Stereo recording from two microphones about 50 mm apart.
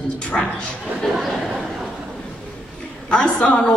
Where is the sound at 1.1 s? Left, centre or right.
Centre.